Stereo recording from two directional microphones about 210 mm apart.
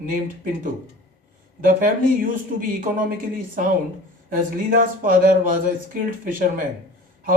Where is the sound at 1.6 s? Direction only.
40° right (ahead or behind).